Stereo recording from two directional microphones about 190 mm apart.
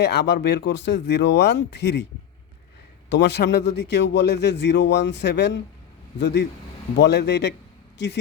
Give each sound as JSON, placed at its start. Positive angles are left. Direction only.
{"t": 0.0, "sound": "a man's voice", "side_deg": 65}
{"t": 3.1, "sound": "a man's voice", "side_deg": 65}